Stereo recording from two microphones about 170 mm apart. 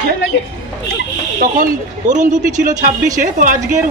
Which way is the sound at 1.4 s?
50° right (ahead or behind).